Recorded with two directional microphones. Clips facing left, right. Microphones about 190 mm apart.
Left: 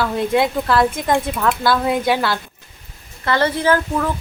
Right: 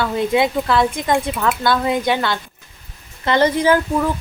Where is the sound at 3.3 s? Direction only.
15° right (ahead or behind).